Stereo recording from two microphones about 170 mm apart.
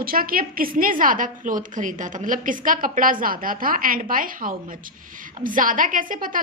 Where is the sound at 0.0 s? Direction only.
60° right (ahead or behind).